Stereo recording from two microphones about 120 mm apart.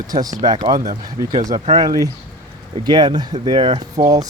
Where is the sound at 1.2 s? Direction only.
25° right (ahead or behind).